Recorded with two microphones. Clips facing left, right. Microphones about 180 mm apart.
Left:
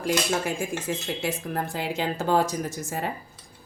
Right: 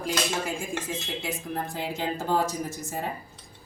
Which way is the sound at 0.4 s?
70° left (ahead or behind).